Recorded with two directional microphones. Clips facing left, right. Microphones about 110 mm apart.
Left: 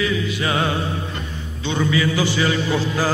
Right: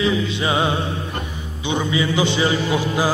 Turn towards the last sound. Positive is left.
turn(degrees=-15)  # may be behind; listen again after turning